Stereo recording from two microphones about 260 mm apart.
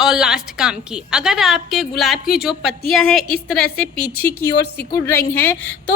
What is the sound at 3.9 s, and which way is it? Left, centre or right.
Speech, left.